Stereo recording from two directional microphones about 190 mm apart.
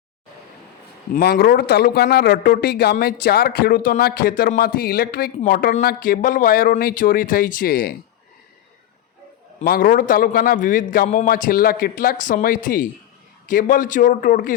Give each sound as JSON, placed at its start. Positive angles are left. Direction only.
{"t": 1.1, "sound": "a man's voice", "side_deg": 55}
{"t": 9.6, "sound": "a man's voice", "side_deg": 50}